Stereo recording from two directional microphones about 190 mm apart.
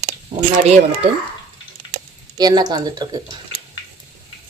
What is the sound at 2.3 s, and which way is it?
Speech, 20° right (ahead or behind).